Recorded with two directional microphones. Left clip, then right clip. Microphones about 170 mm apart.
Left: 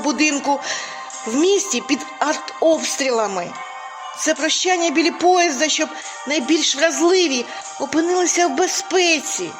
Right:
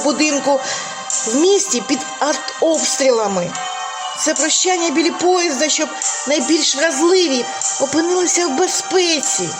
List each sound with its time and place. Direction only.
0.0 s speech: 35° left (ahead or behind)